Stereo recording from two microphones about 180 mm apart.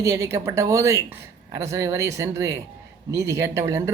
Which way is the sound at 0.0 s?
15° right (ahead or behind).